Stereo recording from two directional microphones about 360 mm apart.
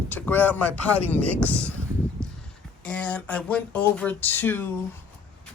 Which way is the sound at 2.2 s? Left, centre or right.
Centre.